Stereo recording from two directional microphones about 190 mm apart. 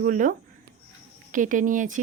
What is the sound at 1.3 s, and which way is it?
Speech, 45° right (ahead or behind).